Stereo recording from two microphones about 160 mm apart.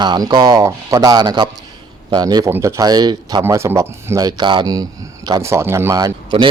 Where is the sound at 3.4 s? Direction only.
15° right (ahead or behind).